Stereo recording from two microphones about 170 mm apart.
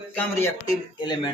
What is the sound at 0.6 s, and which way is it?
Speech, 25° left (ahead or behind).